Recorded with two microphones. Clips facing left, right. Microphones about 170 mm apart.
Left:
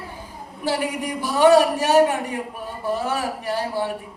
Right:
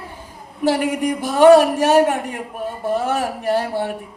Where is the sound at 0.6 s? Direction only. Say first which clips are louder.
Right 6 dB; 45° right (ahead or behind).